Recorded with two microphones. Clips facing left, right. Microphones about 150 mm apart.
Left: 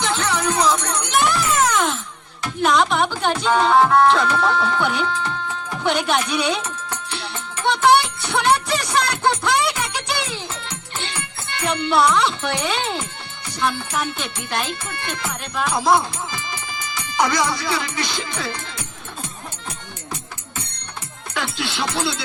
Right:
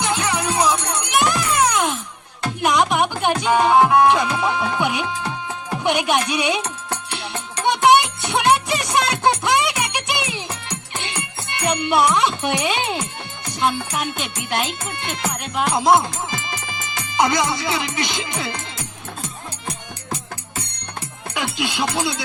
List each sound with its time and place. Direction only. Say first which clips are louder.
0.0 s speech: even; 10° right (ahead or behind)
1.3 s music: even; 15° right (ahead or behind)
6.6 s music: right 2 dB; 35° right (ahead or behind)
7.6 s music: right 1 dB; 15° right (ahead or behind)
13.6 s speech: right 1 dB; 20° right (ahead or behind)
21.3 s music: right 2 dB; 15° right (ahead or behind)